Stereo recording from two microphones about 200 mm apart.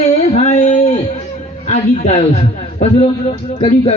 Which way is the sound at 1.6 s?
35° left (ahead or behind).